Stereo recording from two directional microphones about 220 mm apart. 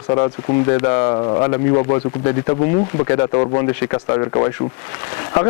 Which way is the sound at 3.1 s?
25° left (ahead or behind).